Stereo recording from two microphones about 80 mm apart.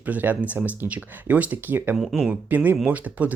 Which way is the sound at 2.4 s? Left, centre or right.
Right.